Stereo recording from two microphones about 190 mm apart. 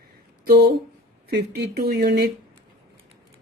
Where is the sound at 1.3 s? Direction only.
55° right (ahead or behind).